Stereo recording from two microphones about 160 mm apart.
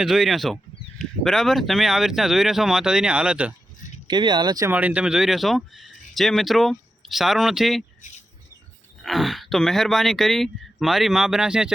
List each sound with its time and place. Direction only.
0.0 s speech: centre (ahead or behind)
4.0 s speech: 25° right (ahead or behind)
4.7 s speech: 10° right (ahead or behind)
9.0 s speech: centre (ahead or behind)